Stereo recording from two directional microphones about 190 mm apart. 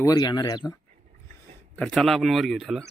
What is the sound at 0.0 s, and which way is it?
Speech, 20° left (ahead or behind).